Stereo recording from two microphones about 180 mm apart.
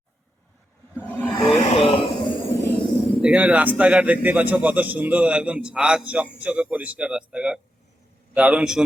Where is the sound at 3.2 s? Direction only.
5° right (ahead or behind).